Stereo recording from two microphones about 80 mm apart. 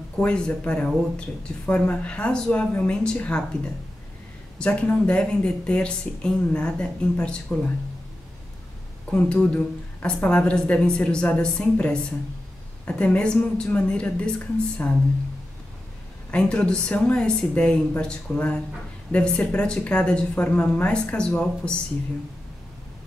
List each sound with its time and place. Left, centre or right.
0.2 s speech: centre
9.2 s speech: centre
16.3 s speech: centre